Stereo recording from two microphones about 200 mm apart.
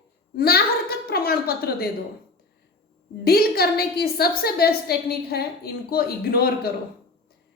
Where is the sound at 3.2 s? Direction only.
50° left (ahead or behind).